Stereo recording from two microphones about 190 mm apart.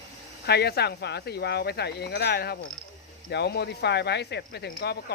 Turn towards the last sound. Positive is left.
turn(degrees=60)  # may be behind; listen again after turning